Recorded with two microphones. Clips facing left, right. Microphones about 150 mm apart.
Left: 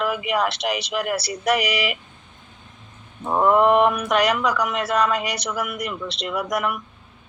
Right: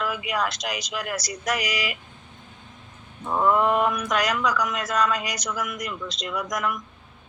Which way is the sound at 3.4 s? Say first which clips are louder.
Left 5 dB; 55° left (ahead or behind).